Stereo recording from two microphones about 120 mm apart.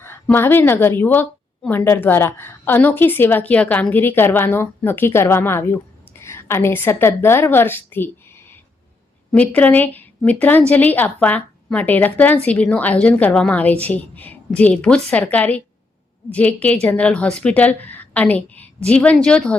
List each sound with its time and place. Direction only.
0.0 s a woman's voice: 20° left (ahead or behind)
9.3 s a woman's voice: 10° left (ahead or behind)